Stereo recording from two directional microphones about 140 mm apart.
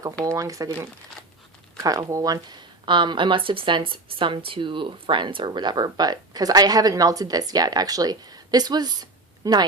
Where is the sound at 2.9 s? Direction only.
35° right (ahead or behind).